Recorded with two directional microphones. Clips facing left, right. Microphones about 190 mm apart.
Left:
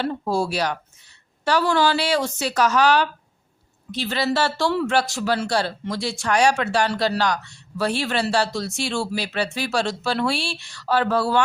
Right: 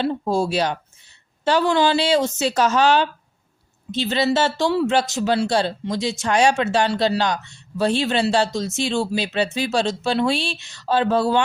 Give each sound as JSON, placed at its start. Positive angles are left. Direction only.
{"t": 0.0, "sound": "speech", "side_deg": -20}